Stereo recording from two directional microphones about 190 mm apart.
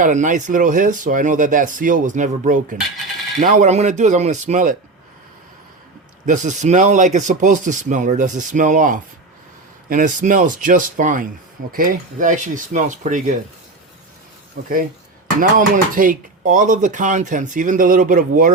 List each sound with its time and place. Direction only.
0.0 s speech: 40° right (ahead or behind)
6.2 s speech: 40° right (ahead or behind)
14.5 s speech: 50° right (ahead or behind)